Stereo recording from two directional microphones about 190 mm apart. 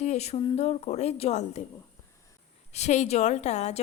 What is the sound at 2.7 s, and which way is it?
A woman's voice, 35° left (ahead or behind).